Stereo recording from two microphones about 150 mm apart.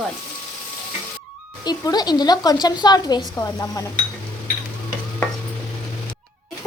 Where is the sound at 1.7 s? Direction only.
25° left (ahead or behind).